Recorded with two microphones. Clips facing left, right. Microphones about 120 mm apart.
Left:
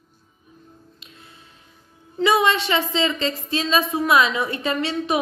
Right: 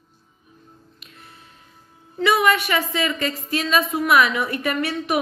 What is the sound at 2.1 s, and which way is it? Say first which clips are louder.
A woman's voice: even; 25° left (ahead or behind).